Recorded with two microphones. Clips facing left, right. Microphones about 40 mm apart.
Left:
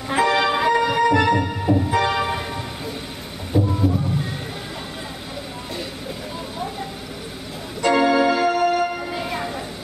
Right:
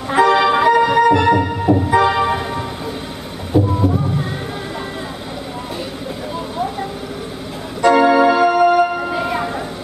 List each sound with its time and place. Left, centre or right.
0.3 s music: centre
3.5 s a sound: centre
7.8 s organ: centre